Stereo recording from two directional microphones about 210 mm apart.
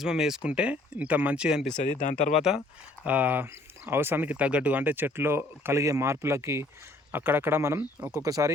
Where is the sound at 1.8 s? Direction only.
35° left (ahead or behind).